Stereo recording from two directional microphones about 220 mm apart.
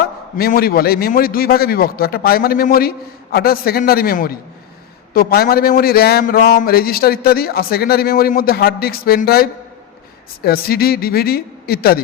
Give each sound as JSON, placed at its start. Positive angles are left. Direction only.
{"t": 0.3, "sound": "a man's voice", "side_deg": 45}